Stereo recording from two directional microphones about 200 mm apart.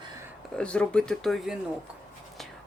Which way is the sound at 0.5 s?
5° left (ahead or behind).